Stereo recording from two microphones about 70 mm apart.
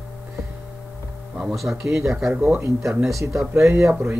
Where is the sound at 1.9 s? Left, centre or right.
Right.